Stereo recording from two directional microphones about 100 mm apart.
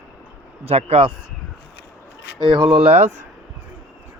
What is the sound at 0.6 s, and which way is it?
Speech, 90° right.